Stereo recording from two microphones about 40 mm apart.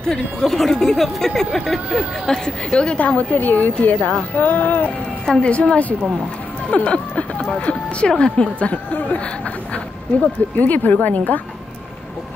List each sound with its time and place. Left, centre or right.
0.0 s speech: centre
2.2 s a woman's voice: centre; by 4.9 s left
5.2 s a woman's voice: centre
5.5 s a woman's voice: left
10.6 s a woman's voice: left